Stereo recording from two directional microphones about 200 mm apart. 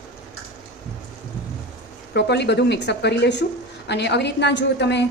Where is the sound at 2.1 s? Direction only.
60° left (ahead or behind).